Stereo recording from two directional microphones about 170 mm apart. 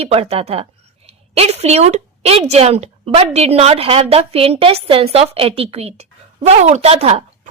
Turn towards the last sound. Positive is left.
turn(degrees=-35)  # may be behind; listen again after turning